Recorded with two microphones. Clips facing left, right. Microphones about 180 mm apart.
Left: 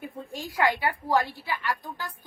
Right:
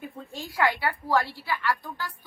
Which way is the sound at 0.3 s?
15° left (ahead or behind).